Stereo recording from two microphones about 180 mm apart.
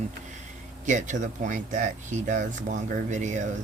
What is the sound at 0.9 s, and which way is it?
Speech, 45° right (ahead or behind).